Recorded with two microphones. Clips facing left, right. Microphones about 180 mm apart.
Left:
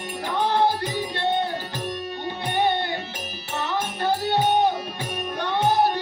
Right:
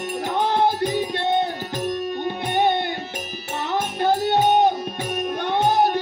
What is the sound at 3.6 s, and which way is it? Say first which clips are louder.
Music: right 4 dB; 50° right (ahead or behind).